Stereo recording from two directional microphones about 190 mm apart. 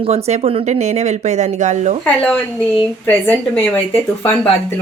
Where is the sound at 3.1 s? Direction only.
10° left (ahead or behind).